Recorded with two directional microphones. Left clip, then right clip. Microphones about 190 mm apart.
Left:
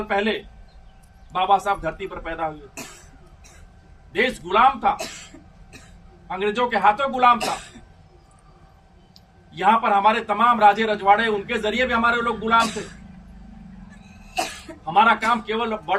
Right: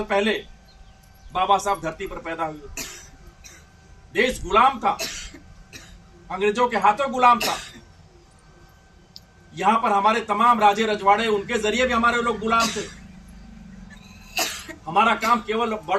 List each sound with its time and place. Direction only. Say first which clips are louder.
0.1 s a man's voice: right 1 dB; 10° right (ahead or behind)
4.1 s a man's voice: right 1 dB; 5° right (ahead or behind)
4.9 s speech: right 2 dB; 30° left (ahead or behind)
6.2 s a man's voice: right 1 dB; 5° right (ahead or behind)
9.6 s a man's voice: left 2 dB; 5° right (ahead or behind)
12.5 s a man's voice: left 4 dB; 35° left (ahead or behind)
14.3 s cough: right 1 dB; 30° left (ahead or behind)
15.1 s a man's voice: even; centre (ahead or behind)